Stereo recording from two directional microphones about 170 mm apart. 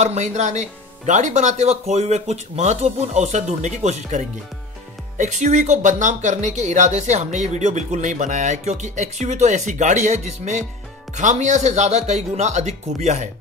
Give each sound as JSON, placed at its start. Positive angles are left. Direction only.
{"t": 0.0, "sound": "speech", "side_deg": -40}